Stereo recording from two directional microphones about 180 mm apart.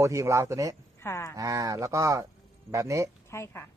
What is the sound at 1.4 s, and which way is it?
A man's voice, 20° right (ahead or behind).